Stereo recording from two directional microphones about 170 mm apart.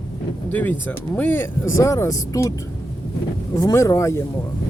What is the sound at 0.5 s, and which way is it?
Speech, 10° left (ahead or behind).